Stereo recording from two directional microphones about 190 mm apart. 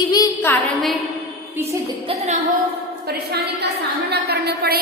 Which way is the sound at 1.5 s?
15° right (ahead or behind).